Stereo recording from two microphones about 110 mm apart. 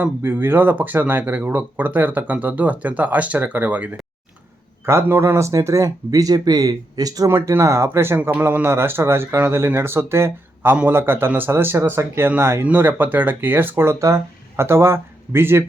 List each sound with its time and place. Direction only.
0.0 s speech: 20° right (ahead or behind)